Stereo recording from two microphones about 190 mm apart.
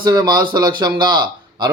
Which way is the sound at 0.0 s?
20° right (ahead or behind).